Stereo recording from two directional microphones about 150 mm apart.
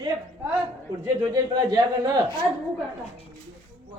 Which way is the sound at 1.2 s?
25° right (ahead or behind).